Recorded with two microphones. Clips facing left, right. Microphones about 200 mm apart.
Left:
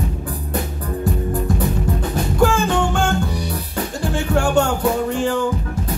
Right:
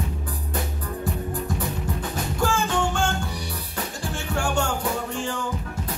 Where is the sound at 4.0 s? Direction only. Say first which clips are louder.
Left 9 dB; 60° left (ahead or behind).